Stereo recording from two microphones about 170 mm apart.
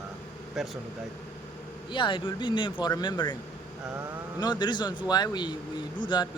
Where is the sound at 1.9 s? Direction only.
30° left (ahead or behind).